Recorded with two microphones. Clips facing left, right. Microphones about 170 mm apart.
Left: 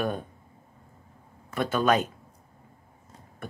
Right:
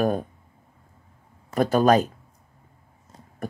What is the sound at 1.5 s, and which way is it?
Speech, 40° right (ahead or behind).